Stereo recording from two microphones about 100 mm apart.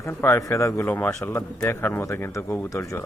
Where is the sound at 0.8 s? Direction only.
15° left (ahead or behind).